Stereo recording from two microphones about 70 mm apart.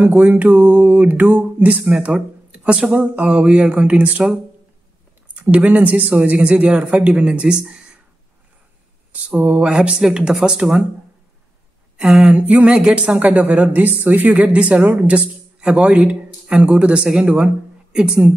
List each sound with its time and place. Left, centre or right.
0.0 s a sound: right
2.0 s speech: centre
5.3 s speech: right
9.3 s speech: centre
12.0 s speech: centre
12.4 s a sound: right
12.7 s speech: centre